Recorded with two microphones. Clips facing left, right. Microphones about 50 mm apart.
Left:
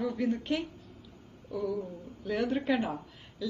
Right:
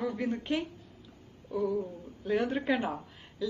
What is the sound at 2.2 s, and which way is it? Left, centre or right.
Speech, centre.